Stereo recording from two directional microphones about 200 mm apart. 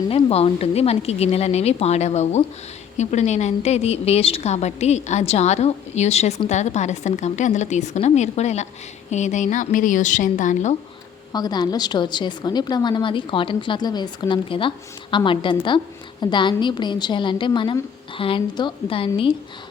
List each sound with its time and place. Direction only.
0.1 s a woman's voice: 30° left (ahead or behind)
11.3 s a woman's voice: 20° left (ahead or behind)